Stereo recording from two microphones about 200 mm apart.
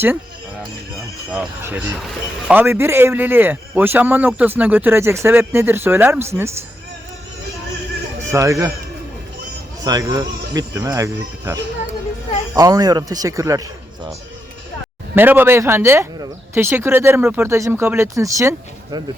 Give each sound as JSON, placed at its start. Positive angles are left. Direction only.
{"t": 0.9, "sound": "speech", "side_deg": -5}
{"t": 8.3, "sound": "speech", "side_deg": -15}
{"t": 9.8, "sound": "speech", "side_deg": -15}
{"t": 15.1, "sound": "speech", "side_deg": -10}